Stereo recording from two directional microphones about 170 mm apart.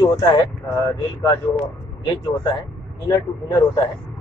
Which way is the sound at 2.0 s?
30° left (ahead or behind).